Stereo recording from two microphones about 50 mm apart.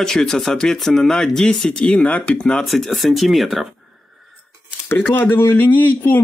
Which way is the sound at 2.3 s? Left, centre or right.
Left.